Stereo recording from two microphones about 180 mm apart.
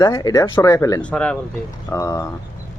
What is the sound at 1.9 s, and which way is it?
Speech, 15° left (ahead or behind).